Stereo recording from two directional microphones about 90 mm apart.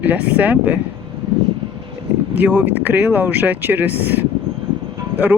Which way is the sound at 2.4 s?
20° right (ahead or behind).